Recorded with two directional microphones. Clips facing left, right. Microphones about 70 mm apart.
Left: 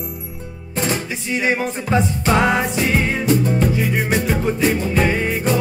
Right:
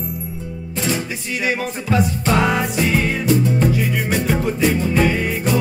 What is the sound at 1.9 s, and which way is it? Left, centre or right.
Speech, left.